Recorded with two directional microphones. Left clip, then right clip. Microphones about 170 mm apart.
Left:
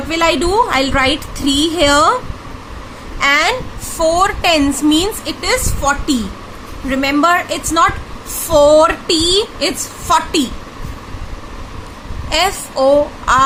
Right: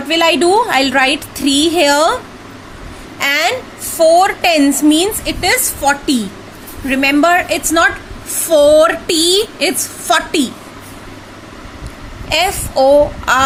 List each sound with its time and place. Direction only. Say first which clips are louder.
0.1 s a woman's voice: right 3 dB; 20° right (ahead or behind)
3.2 s a woman's voice: left 1 dB; 20° right (ahead or behind)
12.3 s a woman's voice: right 1 dB; 20° right (ahead or behind)